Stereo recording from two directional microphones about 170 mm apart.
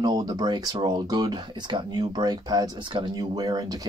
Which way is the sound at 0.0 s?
25° right (ahead or behind).